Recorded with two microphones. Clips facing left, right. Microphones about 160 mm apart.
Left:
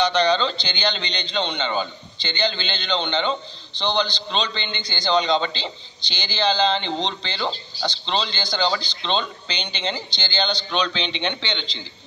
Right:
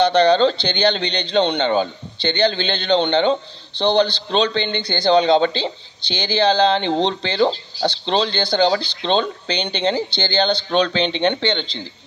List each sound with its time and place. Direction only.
0.0 s speech: 55° right (ahead or behind)